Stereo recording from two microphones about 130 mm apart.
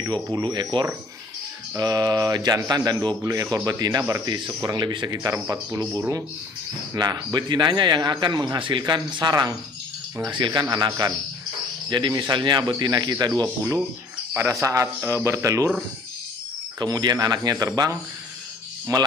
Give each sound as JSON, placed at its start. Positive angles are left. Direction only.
{"t": 0.1, "sound": "a man's voice", "side_deg": -30}
{"t": 11.9, "sound": "a man's voice", "side_deg": -35}
{"t": 14.3, "sound": "speech", "side_deg": -20}
{"t": 16.8, "sound": "speech", "side_deg": -30}